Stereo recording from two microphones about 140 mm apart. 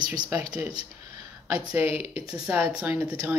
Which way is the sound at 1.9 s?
40° left (ahead or behind).